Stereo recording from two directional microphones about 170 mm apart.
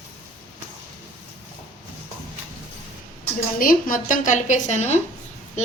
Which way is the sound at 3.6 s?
55° left (ahead or behind).